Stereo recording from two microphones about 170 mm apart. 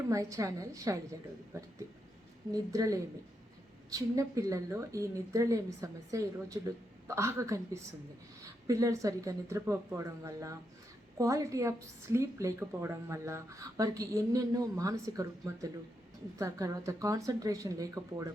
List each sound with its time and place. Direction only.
0.1 s a woman's voice: 20° right (ahead or behind)